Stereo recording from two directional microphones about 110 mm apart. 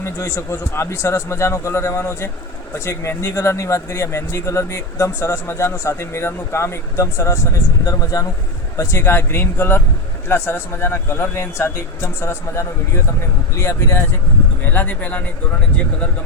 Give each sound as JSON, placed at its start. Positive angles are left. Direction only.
{"t": 0.0, "sound": "speech", "side_deg": 25}